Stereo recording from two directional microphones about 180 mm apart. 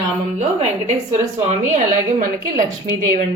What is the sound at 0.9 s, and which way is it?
A woman's voice, 40° right (ahead or behind).